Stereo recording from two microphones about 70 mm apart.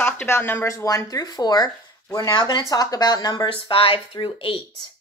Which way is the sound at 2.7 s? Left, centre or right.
Left.